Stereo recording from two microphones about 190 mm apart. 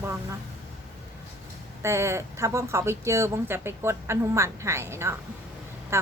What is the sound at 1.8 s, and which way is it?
Speech, 15° right (ahead or behind).